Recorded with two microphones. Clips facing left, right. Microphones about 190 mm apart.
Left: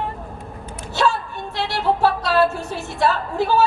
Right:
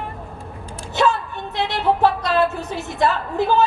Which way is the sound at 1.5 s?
20° right (ahead or behind).